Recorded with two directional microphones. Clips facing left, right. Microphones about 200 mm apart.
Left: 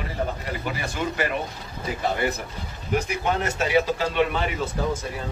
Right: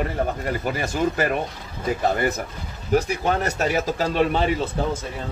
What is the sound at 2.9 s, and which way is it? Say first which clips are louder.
Speech: right 4 dB; 35° right (ahead or behind).